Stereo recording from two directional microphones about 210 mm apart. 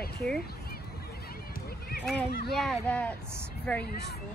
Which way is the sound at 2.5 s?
Centre (ahead or behind).